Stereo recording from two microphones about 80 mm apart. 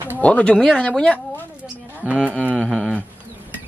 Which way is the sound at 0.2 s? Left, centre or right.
Centre.